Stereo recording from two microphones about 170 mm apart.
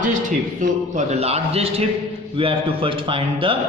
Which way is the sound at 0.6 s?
45° right (ahead or behind).